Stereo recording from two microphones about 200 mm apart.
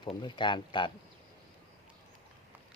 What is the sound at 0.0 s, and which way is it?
Speech, 25° left (ahead or behind).